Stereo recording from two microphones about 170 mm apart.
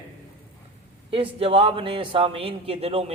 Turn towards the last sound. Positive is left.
turn(degrees=-35)  # may be behind; listen again after turning